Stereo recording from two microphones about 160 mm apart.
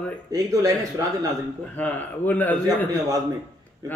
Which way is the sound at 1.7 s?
10° left (ahead or behind).